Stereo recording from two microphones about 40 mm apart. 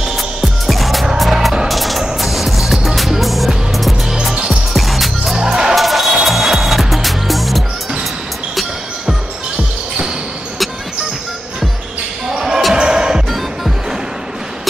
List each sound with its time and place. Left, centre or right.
0.7 s music: centre
4.1 s music: centre
4.7 s music: centre
5.4 s music: centre
5.8 s music: centre
12.3 s basketball bounce: centre
12.7 s music: centre